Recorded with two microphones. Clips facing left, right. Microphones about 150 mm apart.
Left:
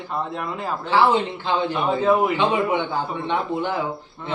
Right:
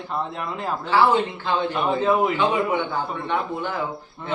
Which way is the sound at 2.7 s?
20° left (ahead or behind).